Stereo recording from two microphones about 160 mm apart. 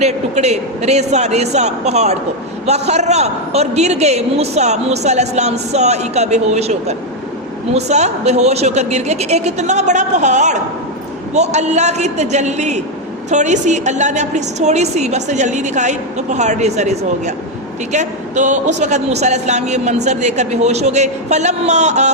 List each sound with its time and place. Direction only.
0.0 s a man's voice: 45° right (ahead or behind)